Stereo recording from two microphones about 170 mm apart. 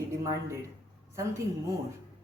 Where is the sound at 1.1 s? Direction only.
20° right (ahead or behind).